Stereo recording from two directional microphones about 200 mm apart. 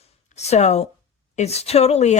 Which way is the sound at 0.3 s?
35° left (ahead or behind).